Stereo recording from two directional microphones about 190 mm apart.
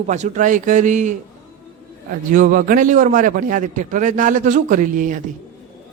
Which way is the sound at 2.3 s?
50° right (ahead or behind).